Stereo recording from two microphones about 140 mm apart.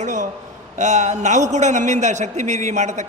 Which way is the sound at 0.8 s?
55° right (ahead or behind).